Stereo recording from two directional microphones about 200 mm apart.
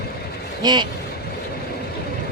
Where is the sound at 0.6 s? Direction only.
20° right (ahead or behind).